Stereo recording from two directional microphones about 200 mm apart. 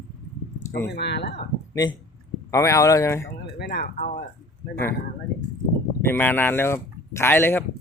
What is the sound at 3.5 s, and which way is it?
Speech, 55° left (ahead or behind).